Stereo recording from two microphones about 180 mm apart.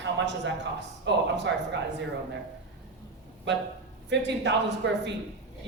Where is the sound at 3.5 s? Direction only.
75° right (ahead or behind).